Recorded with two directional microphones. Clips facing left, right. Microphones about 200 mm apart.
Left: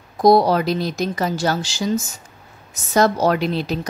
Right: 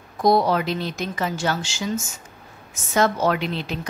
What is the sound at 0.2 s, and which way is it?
A woman's voice, 35° left (ahead or behind).